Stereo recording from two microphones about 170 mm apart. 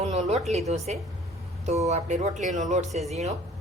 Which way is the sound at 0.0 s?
40° right (ahead or behind).